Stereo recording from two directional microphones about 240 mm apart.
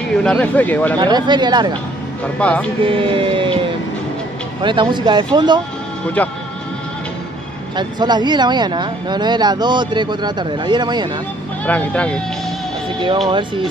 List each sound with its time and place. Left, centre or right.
0.1 s speech: centre
0.9 s speech: centre
2.3 s speech: centre
2.9 s a sound: right
4.6 s speech: centre
6.2 s speech: centre
7.7 s speech: centre
11.6 s speech: centre